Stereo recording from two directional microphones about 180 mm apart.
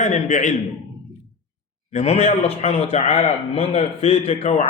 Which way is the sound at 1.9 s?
40° left (ahead or behind).